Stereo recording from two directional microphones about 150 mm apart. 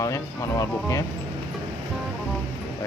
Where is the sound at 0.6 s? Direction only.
20° left (ahead or behind).